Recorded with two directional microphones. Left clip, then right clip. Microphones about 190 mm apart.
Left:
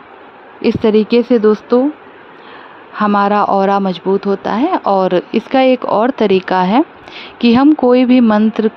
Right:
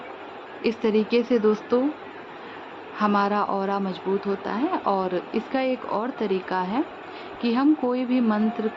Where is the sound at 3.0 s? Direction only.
45° left (ahead or behind).